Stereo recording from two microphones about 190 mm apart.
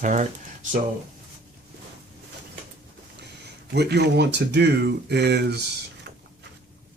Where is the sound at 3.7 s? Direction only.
60° right (ahead or behind).